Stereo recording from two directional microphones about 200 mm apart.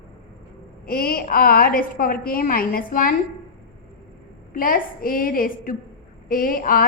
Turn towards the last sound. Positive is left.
turn(degrees=45)  # may be behind; listen again after turning